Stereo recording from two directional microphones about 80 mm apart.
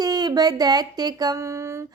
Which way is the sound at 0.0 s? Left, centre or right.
Right.